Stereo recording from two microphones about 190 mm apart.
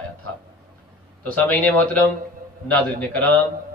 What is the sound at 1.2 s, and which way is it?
A man's voice, 10° left (ahead or behind).